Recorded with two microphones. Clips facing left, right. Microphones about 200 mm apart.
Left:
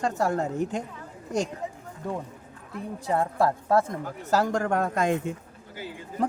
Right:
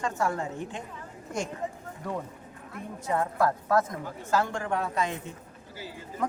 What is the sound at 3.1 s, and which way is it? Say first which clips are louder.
A woman's voice: left 2 dB; 30° left (ahead or behind).